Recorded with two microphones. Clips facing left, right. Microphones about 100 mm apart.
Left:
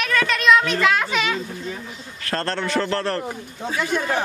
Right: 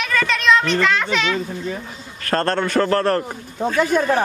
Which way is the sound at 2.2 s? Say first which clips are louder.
Right 5 dB; 50° right (ahead or behind).